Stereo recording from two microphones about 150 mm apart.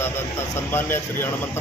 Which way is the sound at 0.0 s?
15° left (ahead or behind).